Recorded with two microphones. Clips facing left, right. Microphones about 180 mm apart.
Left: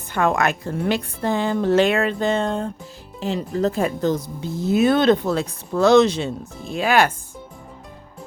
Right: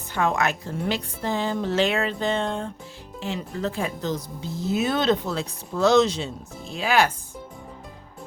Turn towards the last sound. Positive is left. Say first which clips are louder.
# left 3 dB
turn(degrees=55)  # may be behind; listen again after turning